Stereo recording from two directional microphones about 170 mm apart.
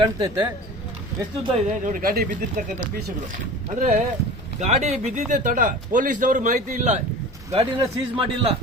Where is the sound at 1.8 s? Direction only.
55° right (ahead or behind).